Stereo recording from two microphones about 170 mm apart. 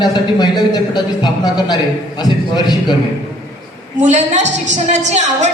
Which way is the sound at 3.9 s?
45° right (ahead or behind).